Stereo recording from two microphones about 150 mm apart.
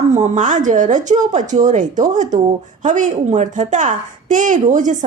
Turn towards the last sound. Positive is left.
turn(degrees=-55)  # may be behind; listen again after turning